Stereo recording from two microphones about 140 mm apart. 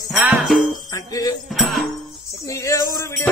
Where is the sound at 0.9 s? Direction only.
25° left (ahead or behind).